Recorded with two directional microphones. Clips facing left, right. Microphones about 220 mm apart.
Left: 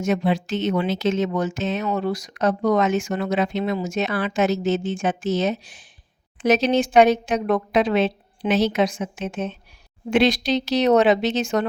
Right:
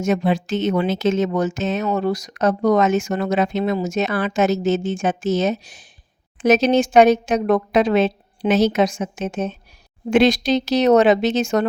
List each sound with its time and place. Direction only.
0.0 s speech: 45° right (ahead or behind)